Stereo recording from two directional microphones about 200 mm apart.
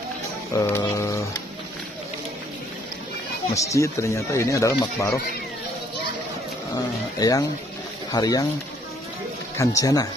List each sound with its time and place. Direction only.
0.6 s speech: 10° left (ahead or behind)
3.5 s speech: 15° left (ahead or behind)
7.2 s speech: 15° left (ahead or behind)
9.8 s speech: 15° left (ahead or behind)